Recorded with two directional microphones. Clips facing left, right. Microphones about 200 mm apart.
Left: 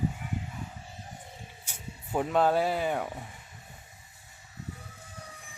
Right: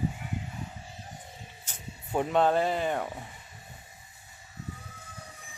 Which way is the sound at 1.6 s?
5° left (ahead or behind).